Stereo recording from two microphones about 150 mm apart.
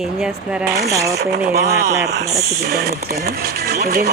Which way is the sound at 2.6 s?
90° right.